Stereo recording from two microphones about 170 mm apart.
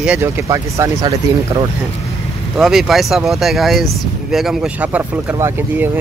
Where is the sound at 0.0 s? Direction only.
10° right (ahead or behind).